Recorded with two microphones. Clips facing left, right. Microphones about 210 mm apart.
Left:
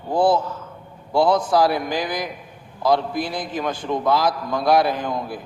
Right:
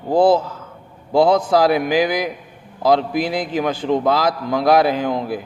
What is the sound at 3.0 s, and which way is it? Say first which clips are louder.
Speech: right 5 dB; 90° right.